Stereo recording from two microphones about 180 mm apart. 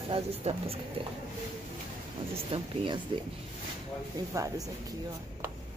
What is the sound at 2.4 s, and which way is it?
Speech, 25° right (ahead or behind).